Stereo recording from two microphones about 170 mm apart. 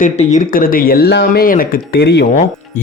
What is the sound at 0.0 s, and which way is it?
Speech, 45° left (ahead or behind).